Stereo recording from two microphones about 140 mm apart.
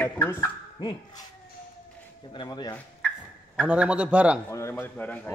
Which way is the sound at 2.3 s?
30° left (ahead or behind).